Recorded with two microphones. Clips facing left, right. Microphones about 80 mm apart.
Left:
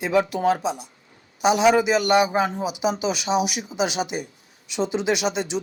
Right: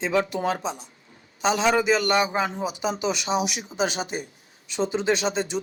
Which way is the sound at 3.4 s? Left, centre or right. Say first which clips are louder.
Left 3 dB; left.